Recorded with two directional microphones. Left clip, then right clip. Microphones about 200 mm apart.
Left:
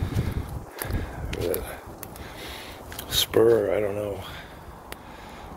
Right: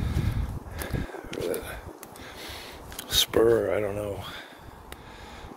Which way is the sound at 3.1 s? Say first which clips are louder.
Left 2 dB; 50° right (ahead or behind).